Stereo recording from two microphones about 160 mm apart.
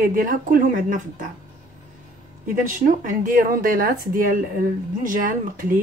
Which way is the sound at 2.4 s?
55° right (ahead or behind).